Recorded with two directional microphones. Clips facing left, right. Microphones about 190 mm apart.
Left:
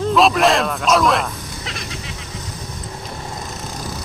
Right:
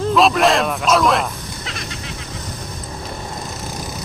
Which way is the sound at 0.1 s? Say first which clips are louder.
Even; centre (ahead or behind).